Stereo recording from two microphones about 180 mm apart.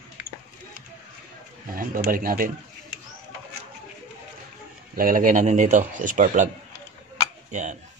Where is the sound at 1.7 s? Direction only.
50° right (ahead or behind).